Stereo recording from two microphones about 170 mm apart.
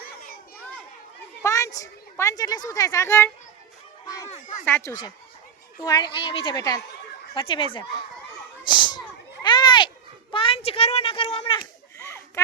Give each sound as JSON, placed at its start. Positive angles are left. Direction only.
{"t": 1.4, "sound": "a child's voice", "side_deg": 20}
{"t": 4.3, "sound": "speech", "side_deg": 45}
{"t": 4.9, "sound": "speech", "side_deg": 15}
{"t": 5.8, "sound": "a woman's voice", "side_deg": 25}
{"t": 7.3, "sound": "speech", "side_deg": 30}
{"t": 9.4, "sound": "a sound", "side_deg": 25}
{"t": 10.3, "sound": "a child's voice", "side_deg": 35}
{"t": 11.9, "sound": "a sound", "side_deg": 15}